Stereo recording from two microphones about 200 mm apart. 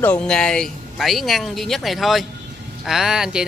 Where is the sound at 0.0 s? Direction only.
5° left (ahead or behind).